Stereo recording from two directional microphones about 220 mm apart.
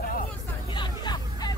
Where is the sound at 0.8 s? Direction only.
20° left (ahead or behind).